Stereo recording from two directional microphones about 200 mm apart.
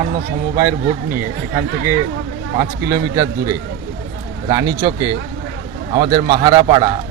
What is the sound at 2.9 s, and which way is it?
Speech, 20° right (ahead or behind).